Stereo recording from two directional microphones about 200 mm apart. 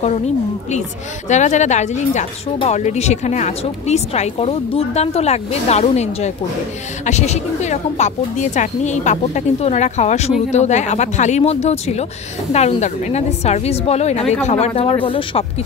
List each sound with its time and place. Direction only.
1.3 s speech: 35° left (ahead or behind)